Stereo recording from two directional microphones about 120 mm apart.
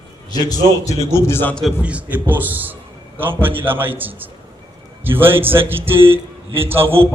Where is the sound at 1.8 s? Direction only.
10° right (ahead or behind).